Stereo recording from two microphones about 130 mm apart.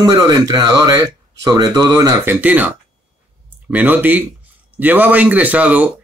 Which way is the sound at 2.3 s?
10° right (ahead or behind).